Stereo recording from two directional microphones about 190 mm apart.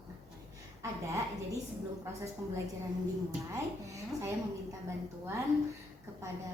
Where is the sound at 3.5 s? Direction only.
15° right (ahead or behind).